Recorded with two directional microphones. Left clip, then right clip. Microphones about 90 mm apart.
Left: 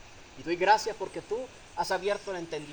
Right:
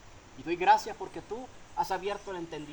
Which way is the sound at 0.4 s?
35° right (ahead or behind).